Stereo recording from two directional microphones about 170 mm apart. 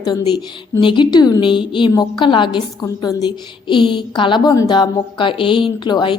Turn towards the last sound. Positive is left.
turn(degrees=25)  # may be behind; listen again after turning